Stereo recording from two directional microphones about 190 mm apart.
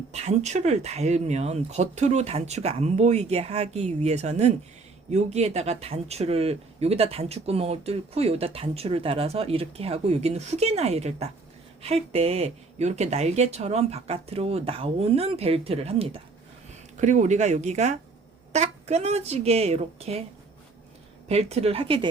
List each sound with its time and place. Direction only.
0.1 s speech: 35° right (ahead or behind)
21.2 s speech: 35° right (ahead or behind)